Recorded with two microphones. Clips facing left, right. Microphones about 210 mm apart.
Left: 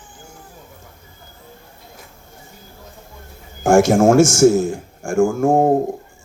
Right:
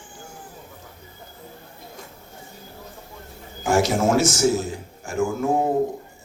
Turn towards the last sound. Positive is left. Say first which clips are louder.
# left 7 dB
turn(degrees=45)  # may be behind; listen again after turning